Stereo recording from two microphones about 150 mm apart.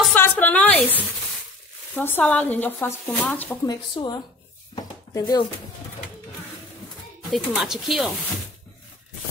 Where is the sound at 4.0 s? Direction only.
35° left (ahead or behind).